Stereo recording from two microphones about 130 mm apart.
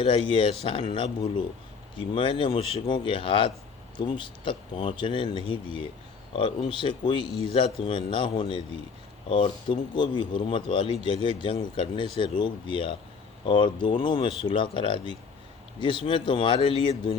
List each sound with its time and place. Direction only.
0.0 s speech: 45° left (ahead or behind)